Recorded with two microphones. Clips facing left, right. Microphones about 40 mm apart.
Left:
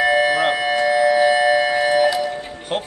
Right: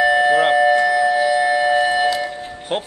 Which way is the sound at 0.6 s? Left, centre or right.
Left.